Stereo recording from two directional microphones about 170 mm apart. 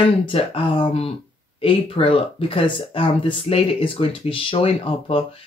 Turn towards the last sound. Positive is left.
turn(degrees=35)  # may be behind; listen again after turning